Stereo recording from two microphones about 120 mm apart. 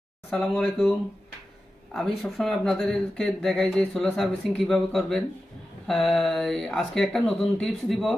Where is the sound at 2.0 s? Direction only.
Centre (ahead or behind).